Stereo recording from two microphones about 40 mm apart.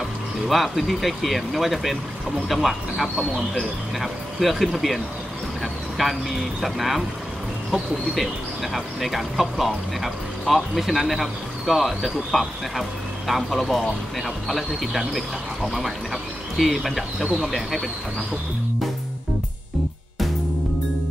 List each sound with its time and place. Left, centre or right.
0.5 s speech: centre
5.6 s a sound: centre
6.6 s speech: centre
8.7 s speech: centre